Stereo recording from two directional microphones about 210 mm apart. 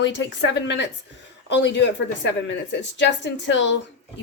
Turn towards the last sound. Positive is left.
turn(degrees=60)  # may be behind; listen again after turning